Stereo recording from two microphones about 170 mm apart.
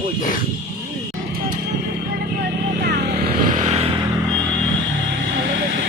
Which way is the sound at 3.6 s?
40° right (ahead or behind).